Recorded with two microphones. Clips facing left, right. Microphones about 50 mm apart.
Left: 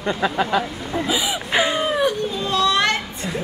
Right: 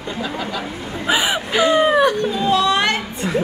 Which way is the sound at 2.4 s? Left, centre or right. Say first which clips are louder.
Right 2 dB; centre.